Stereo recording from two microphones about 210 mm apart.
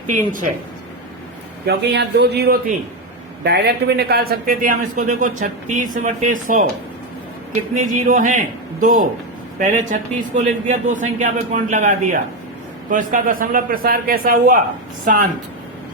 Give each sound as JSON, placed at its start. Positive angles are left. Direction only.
{"t": 0.1, "sound": "a man's voice", "side_deg": -40}
{"t": 1.6, "sound": "a man's voice", "side_deg": -50}
{"t": 7.9, "sound": "a man's voice", "side_deg": -40}